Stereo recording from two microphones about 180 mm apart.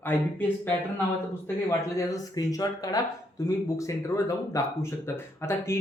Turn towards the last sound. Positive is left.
turn(degrees=15)  # may be behind; listen again after turning